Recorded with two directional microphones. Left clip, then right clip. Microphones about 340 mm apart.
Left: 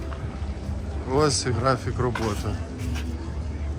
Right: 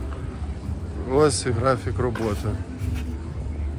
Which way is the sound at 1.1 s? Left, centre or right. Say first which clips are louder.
Right 3 dB; centre.